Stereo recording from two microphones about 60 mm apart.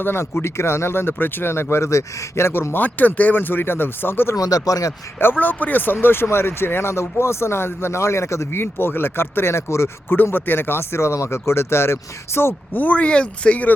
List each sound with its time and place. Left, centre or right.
0.0 s speech: left
2.8 s speech: left
4.4 s speech: left
5.2 s speech: left
10.3 s speech: left
12.7 s speech: left